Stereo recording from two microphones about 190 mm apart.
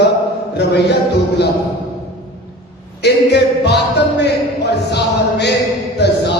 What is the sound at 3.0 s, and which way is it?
Speech, 65° left (ahead or behind).